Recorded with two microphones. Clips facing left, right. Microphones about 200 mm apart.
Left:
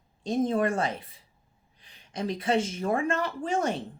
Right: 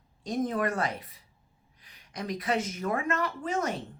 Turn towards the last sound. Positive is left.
turn(degrees=30)  # may be behind; listen again after turning